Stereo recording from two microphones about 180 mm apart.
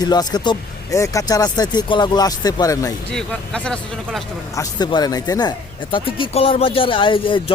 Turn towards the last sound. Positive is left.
turn(degrees=30)  # may be behind; listen again after turning